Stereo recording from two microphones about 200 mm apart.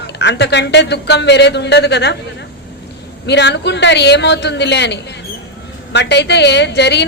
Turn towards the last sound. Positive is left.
turn(degrees=60)  # may be behind; listen again after turning